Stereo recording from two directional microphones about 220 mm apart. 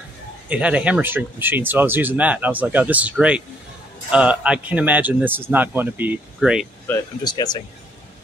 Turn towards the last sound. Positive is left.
turn(degrees=20)  # may be behind; listen again after turning